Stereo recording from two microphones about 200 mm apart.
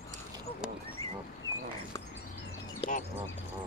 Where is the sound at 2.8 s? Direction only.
25° left (ahead or behind).